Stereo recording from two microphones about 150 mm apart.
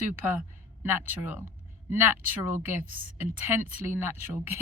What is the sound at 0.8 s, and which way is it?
Speech, 15° right (ahead or behind).